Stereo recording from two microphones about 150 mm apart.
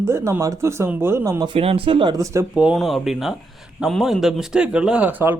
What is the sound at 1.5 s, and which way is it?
Speech, 35° right (ahead or behind).